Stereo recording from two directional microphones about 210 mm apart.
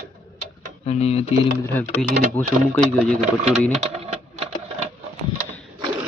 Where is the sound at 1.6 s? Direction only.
10° left (ahead or behind).